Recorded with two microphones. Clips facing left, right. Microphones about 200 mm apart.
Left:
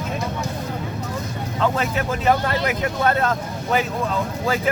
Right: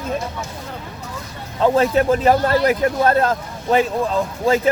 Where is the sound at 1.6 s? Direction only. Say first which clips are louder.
Right 7 dB; 35° right (ahead or behind).